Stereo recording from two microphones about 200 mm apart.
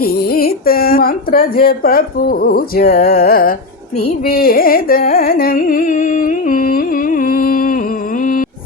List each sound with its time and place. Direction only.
0.0 s speech: 50° left (ahead or behind)
4.3 s carnatic music: 45° left (ahead or behind)
8.2 s music: 45° left (ahead or behind)